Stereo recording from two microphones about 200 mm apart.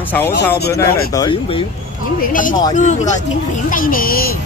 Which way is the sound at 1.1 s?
25° left (ahead or behind).